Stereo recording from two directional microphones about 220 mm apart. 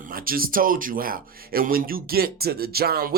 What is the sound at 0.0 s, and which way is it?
Speech, 40° right (ahead or behind).